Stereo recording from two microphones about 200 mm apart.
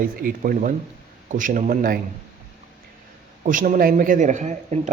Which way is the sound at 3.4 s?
40° right (ahead or behind).